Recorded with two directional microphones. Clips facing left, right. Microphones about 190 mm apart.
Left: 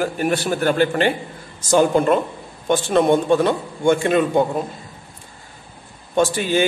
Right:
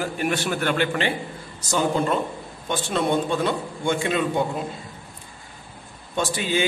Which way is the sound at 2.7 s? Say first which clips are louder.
Left 7 dB; 50° left (ahead or behind).